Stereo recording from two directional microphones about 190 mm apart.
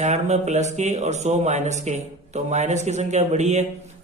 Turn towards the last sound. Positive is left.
turn(degrees=-35)  # may be behind; listen again after turning